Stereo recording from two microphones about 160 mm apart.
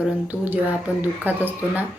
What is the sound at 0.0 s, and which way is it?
A woman's voice, 10° right (ahead or behind).